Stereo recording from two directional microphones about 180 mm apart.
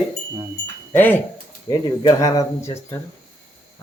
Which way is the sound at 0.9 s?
10° left (ahead or behind).